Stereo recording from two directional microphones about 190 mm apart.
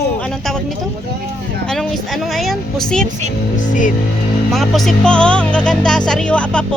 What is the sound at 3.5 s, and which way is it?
Speech, 40° left (ahead or behind).